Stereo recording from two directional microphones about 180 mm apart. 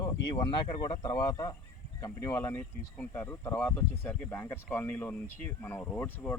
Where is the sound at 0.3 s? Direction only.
25° left (ahead or behind).